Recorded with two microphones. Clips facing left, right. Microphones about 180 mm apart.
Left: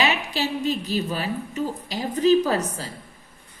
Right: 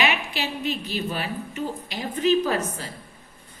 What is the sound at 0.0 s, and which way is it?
A woman's voice, 40° left (ahead or behind).